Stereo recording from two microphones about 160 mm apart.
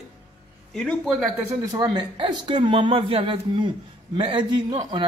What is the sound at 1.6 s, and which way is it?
A man's voice, 25° right (ahead or behind).